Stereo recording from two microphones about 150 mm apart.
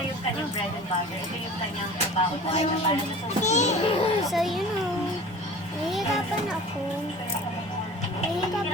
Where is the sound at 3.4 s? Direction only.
50° left (ahead or behind).